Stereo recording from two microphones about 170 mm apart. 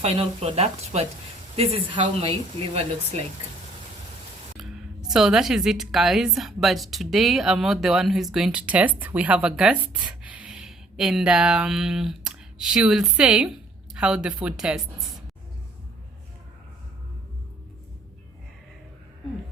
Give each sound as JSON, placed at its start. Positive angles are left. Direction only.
{"t": 0.0, "sound": "speech", "side_deg": -35}
{"t": 4.5, "sound": "a woman's voice", "side_deg": -5}